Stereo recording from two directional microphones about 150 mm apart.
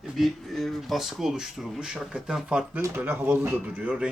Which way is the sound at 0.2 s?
Centre (ahead or behind).